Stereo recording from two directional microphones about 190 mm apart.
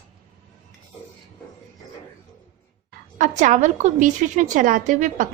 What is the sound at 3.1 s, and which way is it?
A woman's voice, 40° right (ahead or behind).